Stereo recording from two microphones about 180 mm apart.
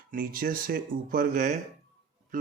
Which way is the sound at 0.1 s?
50° right (ahead or behind).